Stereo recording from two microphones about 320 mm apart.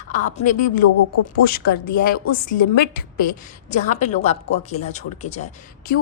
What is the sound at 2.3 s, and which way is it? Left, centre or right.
A woman's voice, left.